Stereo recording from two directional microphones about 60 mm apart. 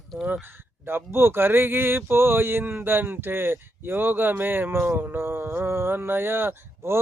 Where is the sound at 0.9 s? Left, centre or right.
Right.